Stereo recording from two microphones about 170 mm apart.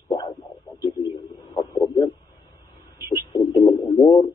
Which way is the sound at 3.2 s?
25° left (ahead or behind).